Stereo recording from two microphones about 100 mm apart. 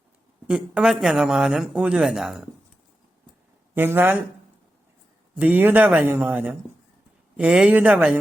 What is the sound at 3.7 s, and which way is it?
Speech, 20° right (ahead or behind).